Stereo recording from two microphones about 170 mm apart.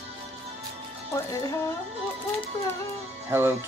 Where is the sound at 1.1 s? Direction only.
20° left (ahead or behind).